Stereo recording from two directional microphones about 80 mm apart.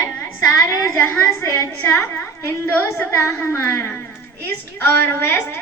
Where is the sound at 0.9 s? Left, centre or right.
Centre.